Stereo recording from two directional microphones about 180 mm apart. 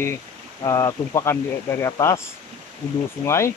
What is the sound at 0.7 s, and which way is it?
Speech, 15° left (ahead or behind).